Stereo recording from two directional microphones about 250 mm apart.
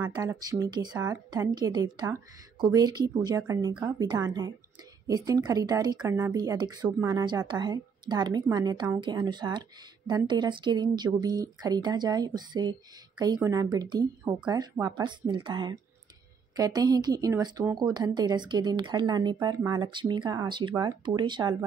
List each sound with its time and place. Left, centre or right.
0.0 s a woman's voice: centre